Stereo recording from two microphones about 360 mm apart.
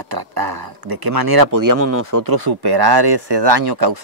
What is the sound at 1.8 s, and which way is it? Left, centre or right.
Speech, right.